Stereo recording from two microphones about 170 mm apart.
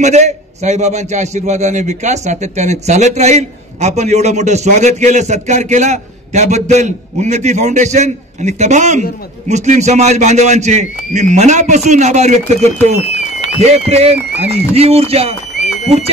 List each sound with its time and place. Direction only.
0.0 s a man's voice: 40° right (ahead or behind)